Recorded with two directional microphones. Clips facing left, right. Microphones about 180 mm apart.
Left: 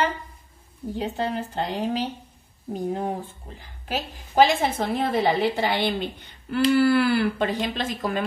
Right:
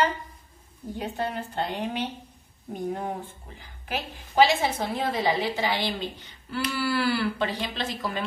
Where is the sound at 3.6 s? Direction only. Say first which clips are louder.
Left 3 dB; 40° left (ahead or behind).